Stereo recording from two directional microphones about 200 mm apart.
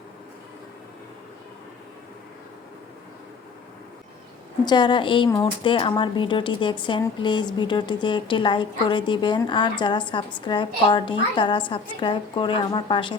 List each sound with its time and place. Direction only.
4.6 s speech: 20° left (ahead or behind)